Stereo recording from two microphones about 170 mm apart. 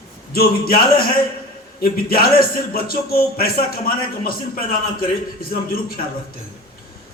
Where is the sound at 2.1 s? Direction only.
60° left (ahead or behind).